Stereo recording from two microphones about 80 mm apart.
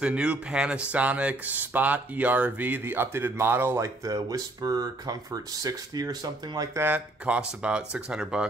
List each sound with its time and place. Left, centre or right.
0.0 s speech: centre; by 3.8 s right
3.8 s speech: right
6.8 s speech: centre